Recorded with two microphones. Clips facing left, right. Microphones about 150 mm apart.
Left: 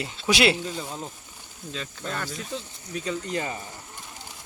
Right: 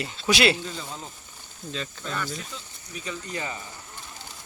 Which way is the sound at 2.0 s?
50° left (ahead or behind).